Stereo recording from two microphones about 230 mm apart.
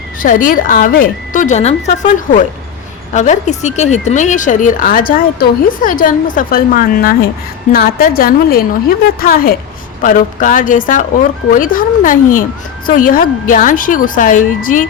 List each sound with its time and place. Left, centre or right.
0.2 s speech: left